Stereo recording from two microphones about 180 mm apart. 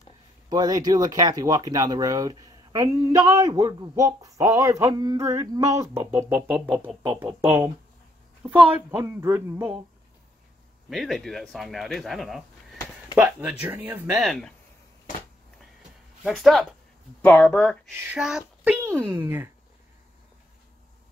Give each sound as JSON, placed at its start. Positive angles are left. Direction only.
{"t": 0.5, "sound": "speech", "side_deg": -20}
{"t": 6.7, "sound": "speech", "side_deg": 0}
{"t": 7.0, "sound": "speech", "side_deg": -15}
{"t": 10.9, "sound": "speech", "side_deg": 0}
{"t": 16.3, "sound": "speech", "side_deg": 0}
{"t": 17.2, "sound": "speech", "side_deg": 10}
{"t": 17.9, "sound": "speech", "side_deg": -10}